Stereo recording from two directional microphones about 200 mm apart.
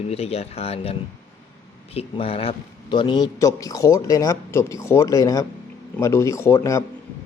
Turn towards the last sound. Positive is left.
turn(degrees=15)  # may be behind; listen again after turning